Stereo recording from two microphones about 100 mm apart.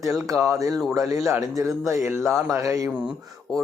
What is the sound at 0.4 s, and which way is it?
A man's voice, 35° right (ahead or behind).